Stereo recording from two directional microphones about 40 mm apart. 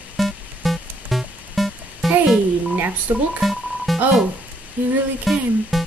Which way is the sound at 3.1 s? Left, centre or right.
Right.